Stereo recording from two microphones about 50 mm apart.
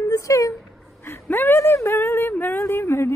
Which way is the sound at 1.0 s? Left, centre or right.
Left.